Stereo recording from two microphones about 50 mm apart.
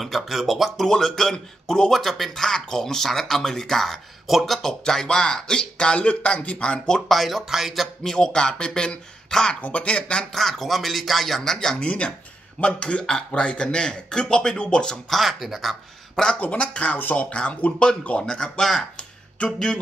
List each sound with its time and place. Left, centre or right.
0.0 s speech: centre
7.1 s speech: centre
8.0 s speech: centre
9.6 s speech: left
10.3 s speech: centre
11.5 s speech: centre
15.0 s speech: centre
16.3 s speech: left; by 18.9 s centre
18.9 s music: left